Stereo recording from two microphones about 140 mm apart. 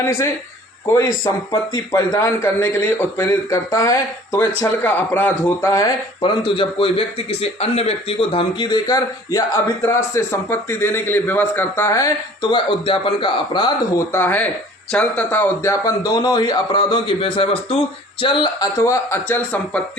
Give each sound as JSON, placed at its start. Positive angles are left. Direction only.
{"t": 0.0, "sound": "a man's voice", "side_deg": 15}
{"t": 6.2, "sound": "a man's voice", "side_deg": 40}
{"t": 12.4, "sound": "a man's voice", "side_deg": 35}
{"t": 14.1, "sound": "a man's voice", "side_deg": 15}
{"t": 18.8, "sound": "a man's voice", "side_deg": 20}